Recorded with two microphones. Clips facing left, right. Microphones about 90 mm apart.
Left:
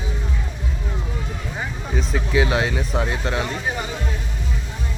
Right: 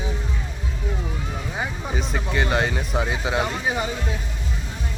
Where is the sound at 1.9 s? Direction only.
Centre (ahead or behind).